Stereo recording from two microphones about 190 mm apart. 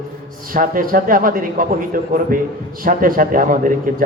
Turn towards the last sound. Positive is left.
turn(degrees=-45)  # may be behind; listen again after turning